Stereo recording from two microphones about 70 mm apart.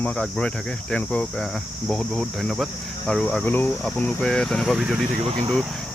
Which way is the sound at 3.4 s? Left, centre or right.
Left.